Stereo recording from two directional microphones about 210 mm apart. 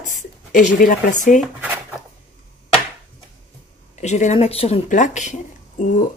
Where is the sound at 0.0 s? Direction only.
35° left (ahead or behind).